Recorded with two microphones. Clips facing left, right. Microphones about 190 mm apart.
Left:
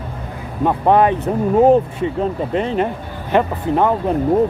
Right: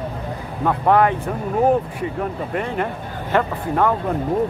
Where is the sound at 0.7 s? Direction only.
20° left (ahead or behind).